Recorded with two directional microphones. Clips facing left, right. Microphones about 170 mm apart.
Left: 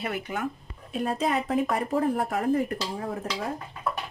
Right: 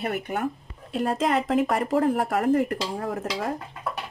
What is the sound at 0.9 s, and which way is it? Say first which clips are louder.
A woman's voice: right 3 dB; 85° right.